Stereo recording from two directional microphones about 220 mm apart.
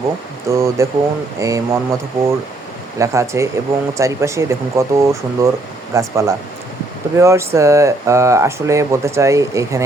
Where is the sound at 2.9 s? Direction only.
15° right (ahead or behind).